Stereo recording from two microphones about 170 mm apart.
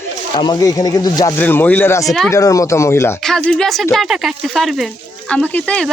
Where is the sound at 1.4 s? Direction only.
10° left (ahead or behind).